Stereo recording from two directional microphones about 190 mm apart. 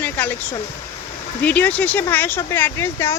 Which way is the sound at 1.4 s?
10° left (ahead or behind).